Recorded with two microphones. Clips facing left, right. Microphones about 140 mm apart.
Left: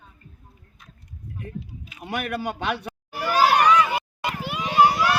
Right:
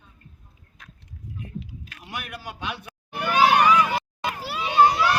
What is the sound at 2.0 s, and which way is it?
Speech, 60° left (ahead or behind).